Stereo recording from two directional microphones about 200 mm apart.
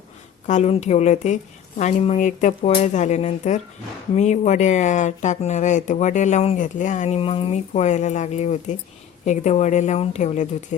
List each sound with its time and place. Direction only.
0.4 s speech: 35° left (ahead or behind)